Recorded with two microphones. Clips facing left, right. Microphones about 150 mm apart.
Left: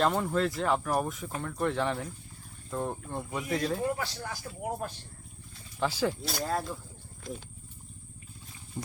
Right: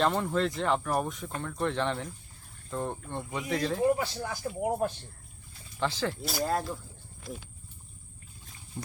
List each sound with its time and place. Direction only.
0.0 s speech: centre (ahead or behind)
3.8 s speech: 20° right (ahead or behind)
5.8 s speech: 10° left (ahead or behind)
6.2 s speech: 5° right (ahead or behind)